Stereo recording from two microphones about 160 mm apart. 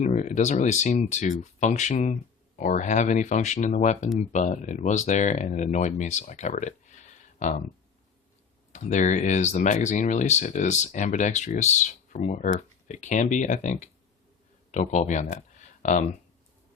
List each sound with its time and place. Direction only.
0.0 s speech: 50° left (ahead or behind)
8.7 s speech: 50° left (ahead or behind)